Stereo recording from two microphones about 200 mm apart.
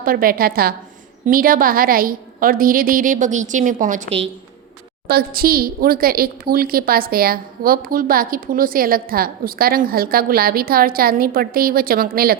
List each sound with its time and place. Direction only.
0.0 s a woman's voice: 45° right (ahead or behind)
5.0 s a woman's voice: 50° right (ahead or behind)